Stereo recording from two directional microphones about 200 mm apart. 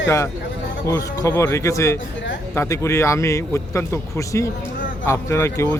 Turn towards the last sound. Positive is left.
turn(degrees=15)  # may be behind; listen again after turning